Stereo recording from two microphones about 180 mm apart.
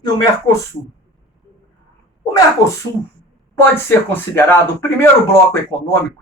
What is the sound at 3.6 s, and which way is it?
Speech, 10° left (ahead or behind).